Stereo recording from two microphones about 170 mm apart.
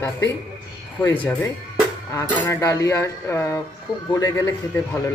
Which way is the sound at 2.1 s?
15° left (ahead or behind).